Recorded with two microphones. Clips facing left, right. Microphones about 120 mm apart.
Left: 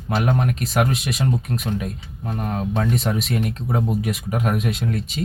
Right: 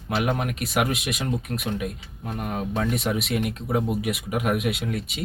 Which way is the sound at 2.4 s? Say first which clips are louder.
Left 3 dB; 35° left (ahead or behind).